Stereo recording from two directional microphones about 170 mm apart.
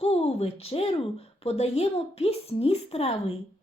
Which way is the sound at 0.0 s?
35° left (ahead or behind).